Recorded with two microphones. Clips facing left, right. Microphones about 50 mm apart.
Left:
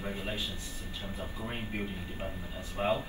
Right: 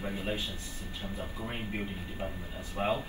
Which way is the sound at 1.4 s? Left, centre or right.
Centre.